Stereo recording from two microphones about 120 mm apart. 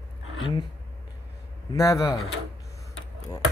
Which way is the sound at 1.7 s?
25° left (ahead or behind).